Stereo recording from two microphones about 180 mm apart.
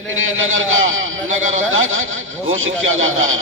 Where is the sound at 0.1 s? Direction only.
90° right.